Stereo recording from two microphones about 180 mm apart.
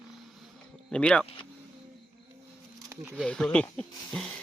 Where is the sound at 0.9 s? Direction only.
5° left (ahead or behind).